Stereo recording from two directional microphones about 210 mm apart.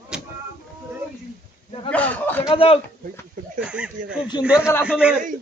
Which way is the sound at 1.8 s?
5° left (ahead or behind).